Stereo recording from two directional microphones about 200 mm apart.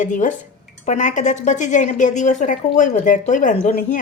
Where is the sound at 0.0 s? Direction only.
40° left (ahead or behind).